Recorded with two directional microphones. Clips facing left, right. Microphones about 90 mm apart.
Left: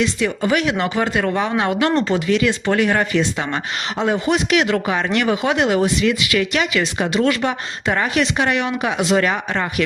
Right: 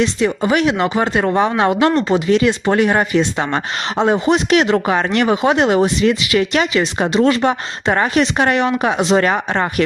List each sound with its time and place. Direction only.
0.0 s speech: 25° right (ahead or behind)
3.3 s speech: 35° right (ahead or behind)
5.2 s speech: 30° right (ahead or behind)